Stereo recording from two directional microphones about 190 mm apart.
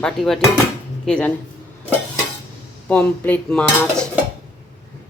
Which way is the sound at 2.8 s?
10° left (ahead or behind).